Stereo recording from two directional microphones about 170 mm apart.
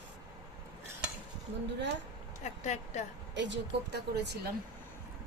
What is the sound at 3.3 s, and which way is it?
Speech, 90° right.